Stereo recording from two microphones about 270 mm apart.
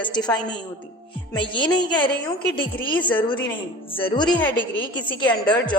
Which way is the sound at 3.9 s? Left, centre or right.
Centre.